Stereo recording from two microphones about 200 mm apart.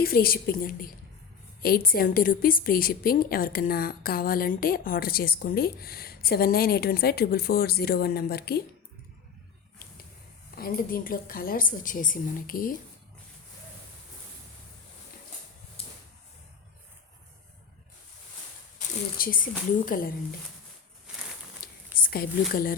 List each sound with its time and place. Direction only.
0.0 s a woman's voice: 50° left (ahead or behind)
10.5 s a woman's voice: 45° left (ahead or behind)
18.8 s a woman's voice: 45° left (ahead or behind)
21.6 s a sound: 50° left (ahead or behind)
21.9 s speech: 45° left (ahead or behind)